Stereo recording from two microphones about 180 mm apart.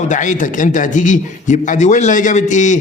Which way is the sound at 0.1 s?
45° left (ahead or behind).